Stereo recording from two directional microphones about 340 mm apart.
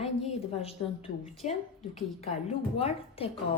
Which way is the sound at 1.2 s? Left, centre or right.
Centre.